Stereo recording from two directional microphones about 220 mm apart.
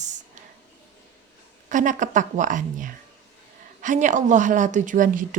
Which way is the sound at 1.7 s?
35° right (ahead or behind).